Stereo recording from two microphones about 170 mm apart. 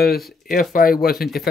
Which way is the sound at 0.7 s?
55° left (ahead or behind).